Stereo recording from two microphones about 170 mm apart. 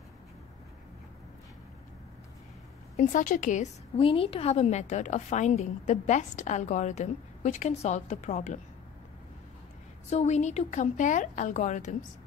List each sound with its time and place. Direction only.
3.0 s a woman's voice: 50° left (ahead or behind)
3.9 s a woman's voice: 30° left (ahead or behind)
10.0 s a woman's voice: 40° left (ahead or behind)